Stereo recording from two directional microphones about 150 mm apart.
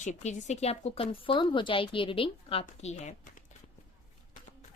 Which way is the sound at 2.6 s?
50° left (ahead or behind).